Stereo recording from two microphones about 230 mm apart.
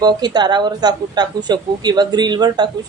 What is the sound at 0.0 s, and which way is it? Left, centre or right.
Speech, centre.